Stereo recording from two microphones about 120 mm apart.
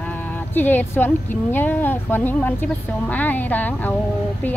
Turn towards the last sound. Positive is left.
turn(degrees=15)  # may be behind; listen again after turning